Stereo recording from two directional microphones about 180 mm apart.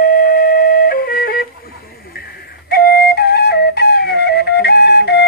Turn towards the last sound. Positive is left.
turn(degrees=70)  # may be behind; listen again after turning